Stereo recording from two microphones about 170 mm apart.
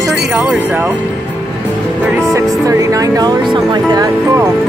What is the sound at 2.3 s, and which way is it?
Speech, 20° right (ahead or behind).